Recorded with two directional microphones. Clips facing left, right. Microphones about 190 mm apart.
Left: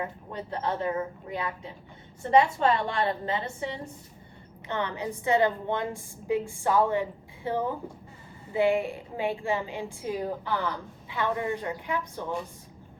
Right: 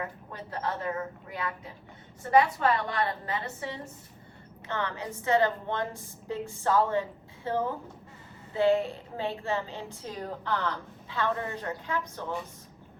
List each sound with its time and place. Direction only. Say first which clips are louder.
0.0 s a woman's voice: left 3 dB; 25° left (ahead or behind)